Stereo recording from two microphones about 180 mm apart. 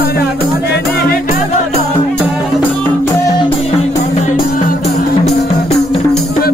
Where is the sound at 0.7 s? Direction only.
65° left (ahead or behind).